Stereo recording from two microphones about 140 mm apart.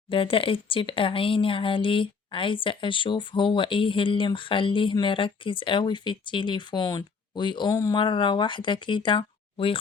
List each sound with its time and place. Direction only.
0.1 s speech: 40° left (ahead or behind); by 7.9 s 25° left (ahead or behind)
7.9 s speech: 35° left (ahead or behind)